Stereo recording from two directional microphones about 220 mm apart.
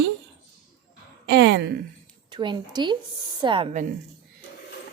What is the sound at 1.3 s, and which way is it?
Speech, 50° right (ahead or behind).